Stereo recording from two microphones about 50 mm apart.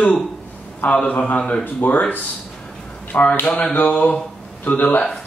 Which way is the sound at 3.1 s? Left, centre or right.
Left.